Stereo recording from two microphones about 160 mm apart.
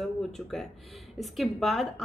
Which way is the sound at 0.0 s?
Centre (ahead or behind).